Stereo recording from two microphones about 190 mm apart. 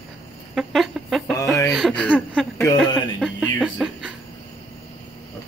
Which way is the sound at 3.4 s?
Centre (ahead or behind).